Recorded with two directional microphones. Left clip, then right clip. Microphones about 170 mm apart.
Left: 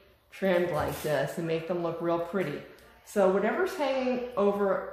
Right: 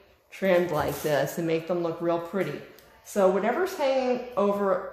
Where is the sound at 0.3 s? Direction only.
35° right (ahead or behind).